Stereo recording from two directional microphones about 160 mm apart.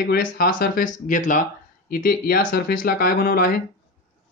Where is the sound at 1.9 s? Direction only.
65° left (ahead or behind).